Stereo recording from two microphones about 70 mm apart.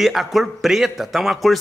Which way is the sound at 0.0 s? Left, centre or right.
Centre.